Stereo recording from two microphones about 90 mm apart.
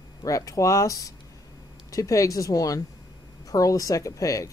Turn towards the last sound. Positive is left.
turn(degrees=40)  # may be behind; listen again after turning